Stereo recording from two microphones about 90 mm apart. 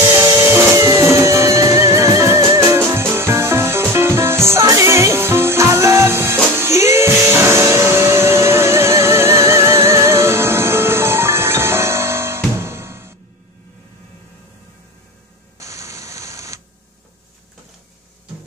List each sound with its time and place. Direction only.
0.1 s printer: 30° right (ahead or behind)
0.7 s music: 40° right (ahead or behind)
15.6 s a sound: 35° right (ahead or behind)